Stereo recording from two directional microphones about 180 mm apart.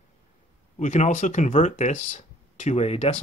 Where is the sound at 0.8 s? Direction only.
45° left (ahead or behind).